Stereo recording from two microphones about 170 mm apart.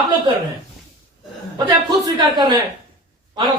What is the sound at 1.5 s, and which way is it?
Speech, 25° right (ahead or behind).